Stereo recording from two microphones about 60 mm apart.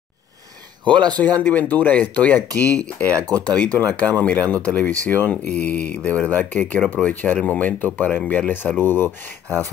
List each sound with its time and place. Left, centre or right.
1.1 s speech: left
3.1 s speech: right
3.4 s speech: left